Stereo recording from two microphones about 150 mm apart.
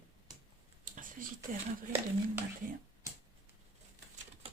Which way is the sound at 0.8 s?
65° right (ahead or behind).